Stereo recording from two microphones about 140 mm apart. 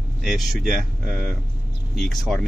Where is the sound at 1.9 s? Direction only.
5° left (ahead or behind).